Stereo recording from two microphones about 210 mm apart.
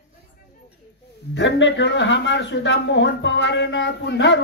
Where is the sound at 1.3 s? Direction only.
60° left (ahead or behind).